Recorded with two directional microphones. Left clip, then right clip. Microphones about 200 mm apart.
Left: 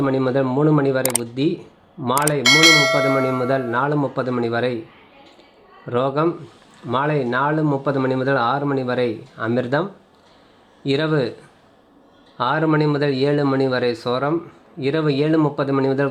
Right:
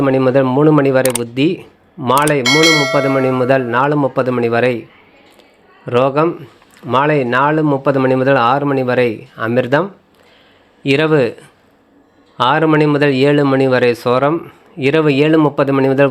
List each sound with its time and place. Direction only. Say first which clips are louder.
0.0 s speech: right 7 dB; 15° right (ahead or behind)
2.4 s bell: right 1 dB; centre (ahead or behind)
3.7 s speech: right 6 dB; 15° right (ahead or behind)
5.8 s speech: right 7 dB; 15° right (ahead or behind)
10.8 s speech: right 8 dB; 15° right (ahead or behind)
12.4 s speech: right 7 dB; 15° right (ahead or behind)